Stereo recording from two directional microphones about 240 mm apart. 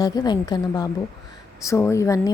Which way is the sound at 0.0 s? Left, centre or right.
Centre.